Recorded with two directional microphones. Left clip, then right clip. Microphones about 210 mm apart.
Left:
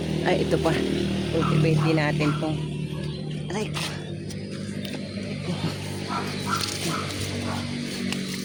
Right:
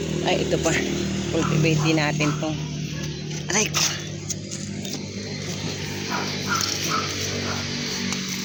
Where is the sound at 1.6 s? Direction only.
10° left (ahead or behind).